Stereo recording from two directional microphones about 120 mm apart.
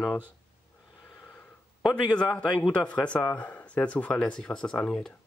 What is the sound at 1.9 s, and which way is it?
Speech, 10° left (ahead or behind).